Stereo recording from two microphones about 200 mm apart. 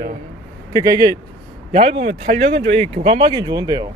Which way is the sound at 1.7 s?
35° right (ahead or behind).